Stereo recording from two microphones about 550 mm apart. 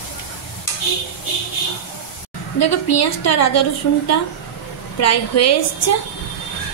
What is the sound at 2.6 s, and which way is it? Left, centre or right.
Speech, left.